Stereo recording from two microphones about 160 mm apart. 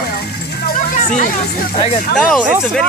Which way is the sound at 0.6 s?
55° left (ahead or behind).